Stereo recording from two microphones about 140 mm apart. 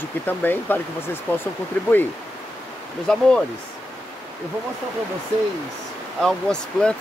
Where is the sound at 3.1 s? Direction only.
5° left (ahead or behind).